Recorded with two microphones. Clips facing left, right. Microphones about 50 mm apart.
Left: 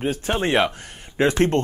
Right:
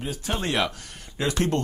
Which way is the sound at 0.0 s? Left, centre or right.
Left.